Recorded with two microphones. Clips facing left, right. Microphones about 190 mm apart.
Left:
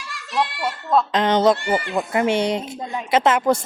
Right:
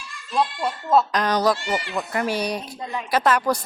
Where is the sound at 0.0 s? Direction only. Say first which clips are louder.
Even; 80° left.